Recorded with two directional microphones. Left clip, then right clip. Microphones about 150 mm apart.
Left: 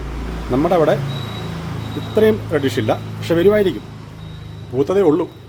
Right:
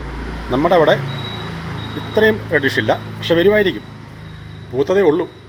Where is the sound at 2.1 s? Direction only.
25° left (ahead or behind).